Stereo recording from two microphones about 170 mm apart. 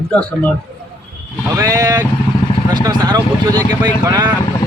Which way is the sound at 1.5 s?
20° right (ahead or behind).